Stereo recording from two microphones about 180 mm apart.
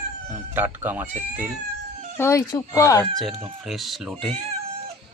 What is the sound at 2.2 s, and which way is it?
Speech, 15° left (ahead or behind).